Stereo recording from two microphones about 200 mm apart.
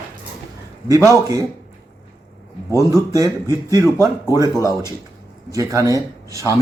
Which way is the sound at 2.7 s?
15° right (ahead or behind).